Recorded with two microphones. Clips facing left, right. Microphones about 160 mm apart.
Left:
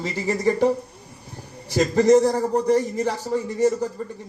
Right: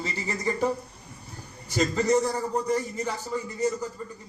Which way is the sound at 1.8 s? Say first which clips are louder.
Left 7 dB; 40° left (ahead or behind).